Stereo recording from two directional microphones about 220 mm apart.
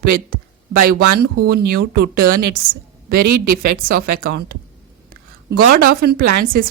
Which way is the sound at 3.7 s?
40° right (ahead or behind).